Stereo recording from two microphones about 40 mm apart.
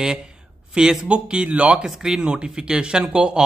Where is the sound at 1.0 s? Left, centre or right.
Right.